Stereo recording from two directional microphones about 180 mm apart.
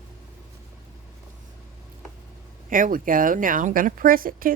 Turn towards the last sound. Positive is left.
turn(degrees=-50)  # may be behind; listen again after turning